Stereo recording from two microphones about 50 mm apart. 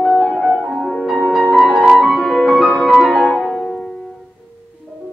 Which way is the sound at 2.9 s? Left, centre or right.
Centre.